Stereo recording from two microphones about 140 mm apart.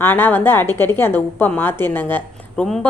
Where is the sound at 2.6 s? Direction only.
Centre (ahead or behind).